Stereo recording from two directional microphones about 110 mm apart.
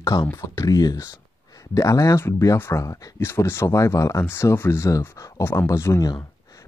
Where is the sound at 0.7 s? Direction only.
35° left (ahead or behind).